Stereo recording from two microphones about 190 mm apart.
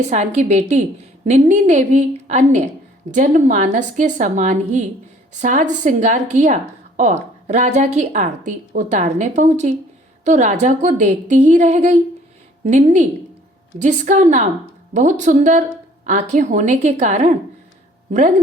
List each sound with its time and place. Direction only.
0.1 s a woman's voice: 40° right (ahead or behind)